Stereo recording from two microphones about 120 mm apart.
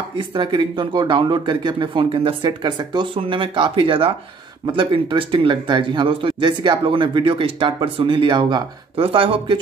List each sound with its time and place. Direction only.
0.2 s speech: 40° right (ahead or behind)